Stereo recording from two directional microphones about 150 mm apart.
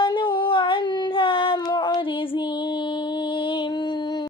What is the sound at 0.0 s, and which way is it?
Child singing, 35° left (ahead or behind).